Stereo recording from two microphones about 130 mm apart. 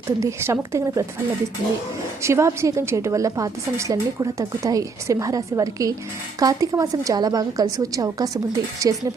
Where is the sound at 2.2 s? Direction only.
20° right (ahead or behind).